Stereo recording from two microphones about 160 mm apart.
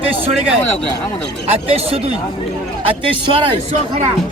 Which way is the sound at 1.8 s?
35° right (ahead or behind).